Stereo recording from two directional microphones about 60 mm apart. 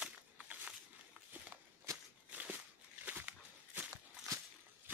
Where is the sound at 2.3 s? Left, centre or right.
Right.